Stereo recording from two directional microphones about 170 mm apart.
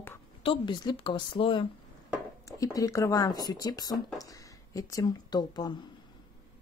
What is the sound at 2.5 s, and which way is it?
Speech, 20° left (ahead or behind).